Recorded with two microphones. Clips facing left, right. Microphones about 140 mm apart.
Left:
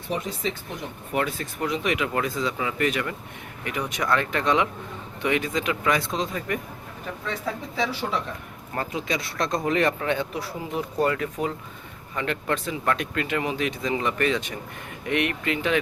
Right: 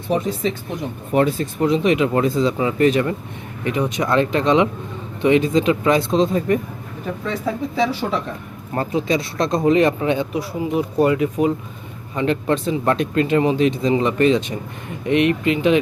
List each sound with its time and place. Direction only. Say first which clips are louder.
0.1 s speech: right 8 dB; 35° right (ahead or behind)
8.7 s speech: right 8 dB; 30° right (ahead or behind)